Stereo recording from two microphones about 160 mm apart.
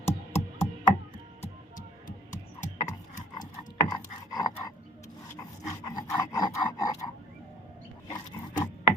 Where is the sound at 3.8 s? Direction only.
25° left (ahead or behind).